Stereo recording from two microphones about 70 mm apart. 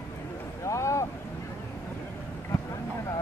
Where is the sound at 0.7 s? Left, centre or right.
Left.